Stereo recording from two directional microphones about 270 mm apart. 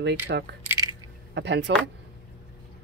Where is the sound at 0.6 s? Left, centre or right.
Centre.